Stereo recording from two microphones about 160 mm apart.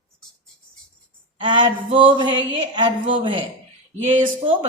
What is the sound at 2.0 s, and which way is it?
Music, 30° right (ahead or behind).